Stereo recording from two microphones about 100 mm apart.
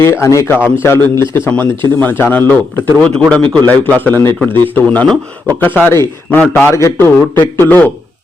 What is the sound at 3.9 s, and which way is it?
A man's voice, 20° left (ahead or behind).